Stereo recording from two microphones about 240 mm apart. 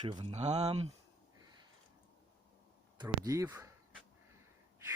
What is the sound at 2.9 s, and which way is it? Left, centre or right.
Speech, centre.